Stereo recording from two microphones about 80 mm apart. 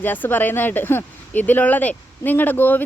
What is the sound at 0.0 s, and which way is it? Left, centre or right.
Speech, left.